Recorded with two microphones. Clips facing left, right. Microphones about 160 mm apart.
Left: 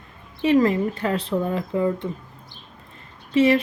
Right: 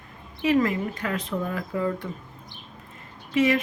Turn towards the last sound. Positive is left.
turn(degrees=30)  # may be behind; listen again after turning